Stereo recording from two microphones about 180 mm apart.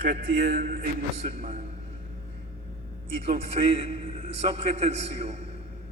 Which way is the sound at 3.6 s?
40° right (ahead or behind).